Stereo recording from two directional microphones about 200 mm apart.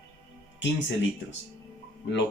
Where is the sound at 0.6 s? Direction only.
65° left (ahead or behind).